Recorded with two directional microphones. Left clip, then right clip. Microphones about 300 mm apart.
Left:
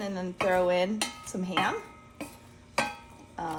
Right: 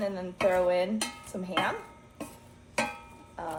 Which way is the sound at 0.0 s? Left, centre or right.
Left.